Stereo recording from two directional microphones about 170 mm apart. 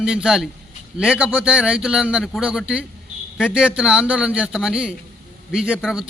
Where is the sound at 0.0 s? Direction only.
5° right (ahead or behind).